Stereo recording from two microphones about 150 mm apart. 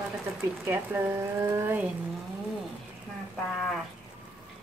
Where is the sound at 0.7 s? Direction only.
15° right (ahead or behind).